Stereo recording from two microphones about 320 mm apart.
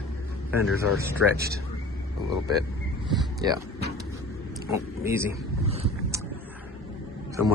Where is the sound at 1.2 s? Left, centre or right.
Left.